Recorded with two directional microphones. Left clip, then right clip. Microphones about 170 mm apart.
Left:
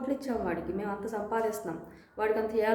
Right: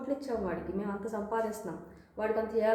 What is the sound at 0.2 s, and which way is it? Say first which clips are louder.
A woman's voice: left 2 dB; 20° left (ahead or behind).